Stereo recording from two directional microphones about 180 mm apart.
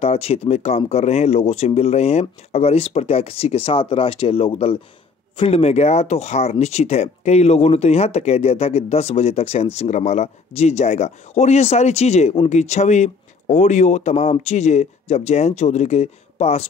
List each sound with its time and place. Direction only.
0.0 s speech: 35° left (ahead or behind)